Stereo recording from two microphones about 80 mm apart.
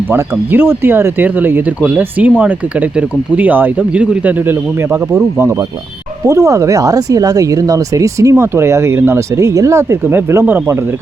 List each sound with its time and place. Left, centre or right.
0.1 s speech: right
6.2 s speech: right
10.0 s speech: right